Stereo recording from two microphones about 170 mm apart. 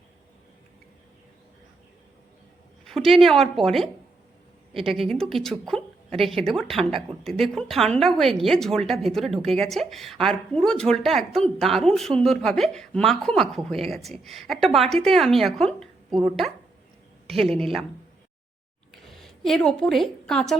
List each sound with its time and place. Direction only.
2.8 s a woman's voice: centre (ahead or behind)
17.3 s speech: 35° right (ahead or behind)
19.0 s a woman's voice: centre (ahead or behind)